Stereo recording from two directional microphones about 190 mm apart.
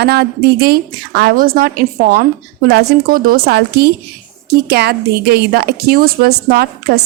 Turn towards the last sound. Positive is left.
turn(degrees=-55)  # may be behind; listen again after turning